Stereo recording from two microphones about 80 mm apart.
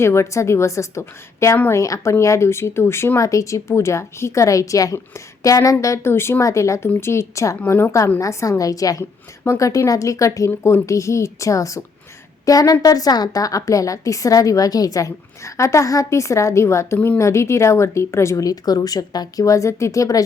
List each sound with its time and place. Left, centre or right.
0.0 s a woman's voice: left
8.2 s a woman's voice: left